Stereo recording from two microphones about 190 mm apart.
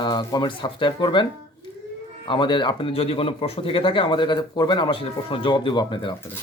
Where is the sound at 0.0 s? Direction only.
25° left (ahead or behind).